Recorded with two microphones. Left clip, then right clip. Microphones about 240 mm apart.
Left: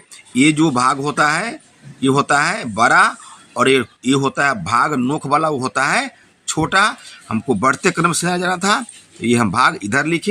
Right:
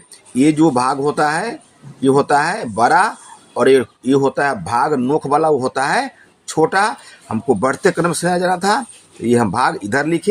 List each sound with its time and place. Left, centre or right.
0.3 s speech: left